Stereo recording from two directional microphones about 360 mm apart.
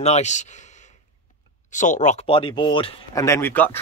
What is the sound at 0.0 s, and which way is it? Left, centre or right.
Speech, centre.